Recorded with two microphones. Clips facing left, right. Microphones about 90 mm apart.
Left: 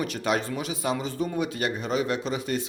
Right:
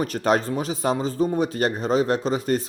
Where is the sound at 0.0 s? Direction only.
40° right (ahead or behind).